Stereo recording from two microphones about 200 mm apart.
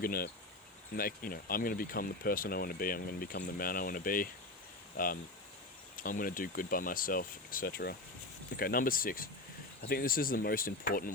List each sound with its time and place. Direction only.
0.0 s speech: 45° left (ahead or behind)